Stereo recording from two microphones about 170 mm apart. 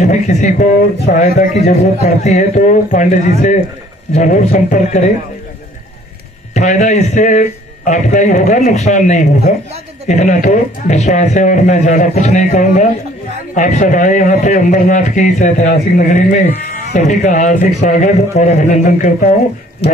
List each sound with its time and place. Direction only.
0.0 s a man's voice: 45° left (ahead or behind)
6.5 s a man's voice: 45° left (ahead or behind)
17.0 s a man's voice: 45° left (ahead or behind)
19.8 s speech: 35° left (ahead or behind)